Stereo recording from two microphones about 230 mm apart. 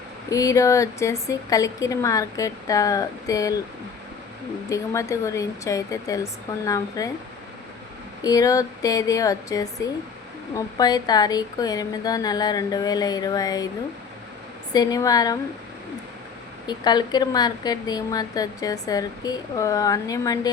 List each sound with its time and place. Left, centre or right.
0.3 s speech: centre
4.7 s speech: centre
8.2 s speech: centre
14.7 s speech: centre
16.6 s speech: centre